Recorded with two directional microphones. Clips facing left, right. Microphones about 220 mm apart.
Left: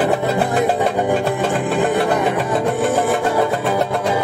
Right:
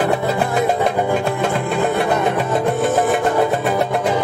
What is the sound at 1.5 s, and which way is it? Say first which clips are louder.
Music: left 1 dB; 15° left (ahead or behind).